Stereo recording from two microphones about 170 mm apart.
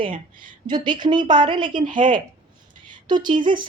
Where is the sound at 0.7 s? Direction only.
25° right (ahead or behind).